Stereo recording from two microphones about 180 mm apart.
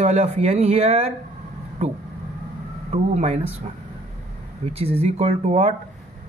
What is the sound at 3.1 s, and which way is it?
Speech, 35° right (ahead or behind).